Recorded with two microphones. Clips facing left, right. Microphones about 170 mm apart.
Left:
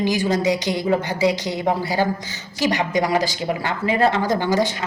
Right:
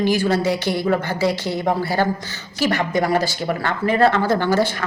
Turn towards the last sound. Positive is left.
turn(degrees=15)  # may be behind; listen again after turning